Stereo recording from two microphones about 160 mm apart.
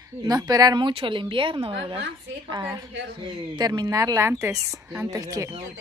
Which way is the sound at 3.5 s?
25° right (ahead or behind).